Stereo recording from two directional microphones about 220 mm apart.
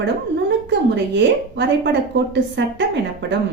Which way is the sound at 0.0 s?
50° right (ahead or behind).